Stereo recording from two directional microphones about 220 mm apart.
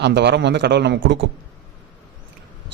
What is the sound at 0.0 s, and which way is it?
A man's voice, 50° right (ahead or behind).